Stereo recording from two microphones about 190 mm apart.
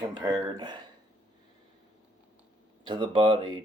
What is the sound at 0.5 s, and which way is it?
Speech, 25° right (ahead or behind).